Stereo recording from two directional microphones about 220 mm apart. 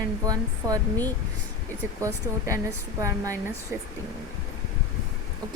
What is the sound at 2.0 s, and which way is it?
Speech, 15° right (ahead or behind).